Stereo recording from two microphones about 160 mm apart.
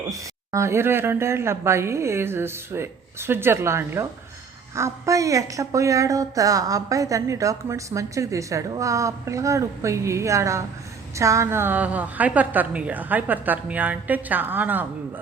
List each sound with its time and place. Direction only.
0.1 s a woman's voice: 20° right (ahead or behind)